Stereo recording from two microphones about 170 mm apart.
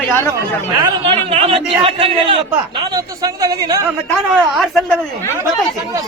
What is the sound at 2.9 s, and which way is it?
Speech, 20° right (ahead or behind).